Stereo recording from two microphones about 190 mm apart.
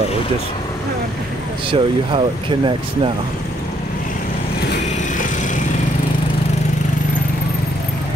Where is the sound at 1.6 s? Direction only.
25° right (ahead or behind).